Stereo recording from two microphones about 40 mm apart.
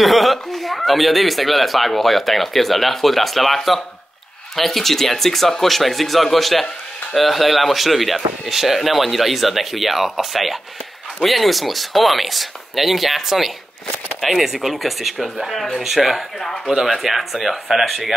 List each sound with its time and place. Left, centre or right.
0.0 s speech: centre
16.3 s speech: centre
16.6 s speech: centre